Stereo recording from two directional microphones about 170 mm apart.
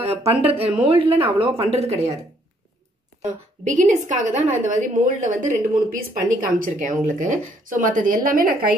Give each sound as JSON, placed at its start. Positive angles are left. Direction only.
{"t": 0.0, "sound": "speech", "side_deg": -35}
{"t": 3.6, "sound": "speech", "side_deg": -45}